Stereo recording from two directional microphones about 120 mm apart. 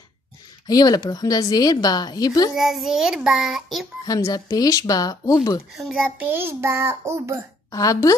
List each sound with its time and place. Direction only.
0.7 s a woman's voice: 30° left (ahead or behind)
2.5 s child singing: centre (ahead or behind)
4.0 s a woman's voice: 30° left (ahead or behind)
5.8 s child singing: centre (ahead or behind)
6.1 s a child's voice: 15° right (ahead or behind)
7.7 s a woman's voice: 30° left (ahead or behind)